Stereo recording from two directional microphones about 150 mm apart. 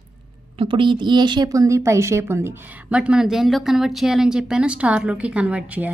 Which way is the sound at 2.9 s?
5° right (ahead or behind).